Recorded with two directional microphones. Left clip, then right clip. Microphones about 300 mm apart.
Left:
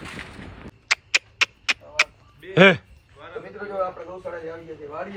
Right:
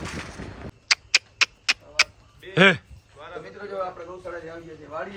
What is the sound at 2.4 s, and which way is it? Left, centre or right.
Speech, centre.